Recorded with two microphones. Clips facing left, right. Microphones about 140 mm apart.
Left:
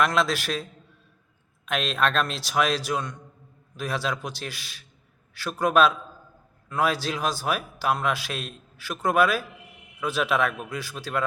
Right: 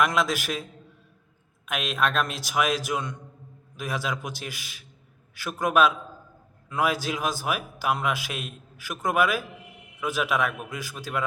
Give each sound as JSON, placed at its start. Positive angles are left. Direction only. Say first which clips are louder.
{"t": 0.0, "sound": "a man's voice", "louder": "left 1 dB", "side_deg": -10}
{"t": 1.6, "sound": "a man's voice", "louder": "left 2 dB", "side_deg": -10}